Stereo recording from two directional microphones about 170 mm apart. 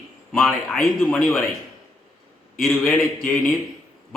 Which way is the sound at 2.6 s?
Centre (ahead or behind).